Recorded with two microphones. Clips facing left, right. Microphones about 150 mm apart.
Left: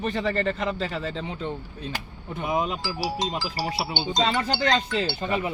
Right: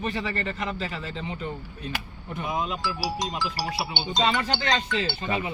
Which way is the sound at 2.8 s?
25° left (ahead or behind).